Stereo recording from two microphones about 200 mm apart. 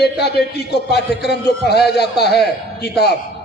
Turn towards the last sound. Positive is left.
turn(degrees=55)  # may be behind; listen again after turning